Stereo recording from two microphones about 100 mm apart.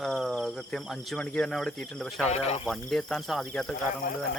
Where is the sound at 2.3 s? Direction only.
90° left.